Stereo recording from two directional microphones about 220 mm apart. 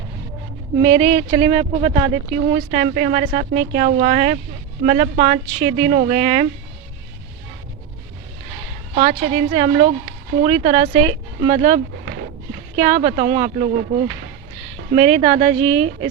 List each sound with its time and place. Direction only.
0.8 s speech: 30° right (ahead or behind)
9.0 s a woman's voice: 35° right (ahead or behind)